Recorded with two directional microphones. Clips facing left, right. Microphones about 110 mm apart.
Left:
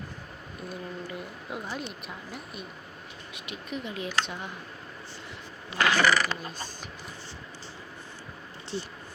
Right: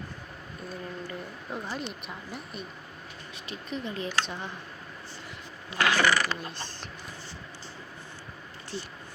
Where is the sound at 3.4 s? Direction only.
10° left (ahead or behind).